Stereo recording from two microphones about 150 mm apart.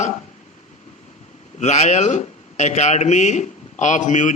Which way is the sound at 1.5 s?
50° left (ahead or behind).